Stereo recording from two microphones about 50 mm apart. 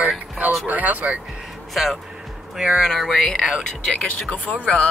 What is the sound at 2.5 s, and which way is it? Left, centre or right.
Speech, centre.